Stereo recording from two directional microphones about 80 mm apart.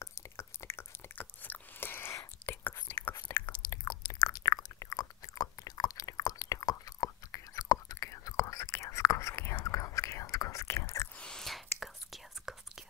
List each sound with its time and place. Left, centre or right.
0.0 s a sound: left
1.5 s whispering: left
3.8 s chewing: left
11.1 s whispering: centre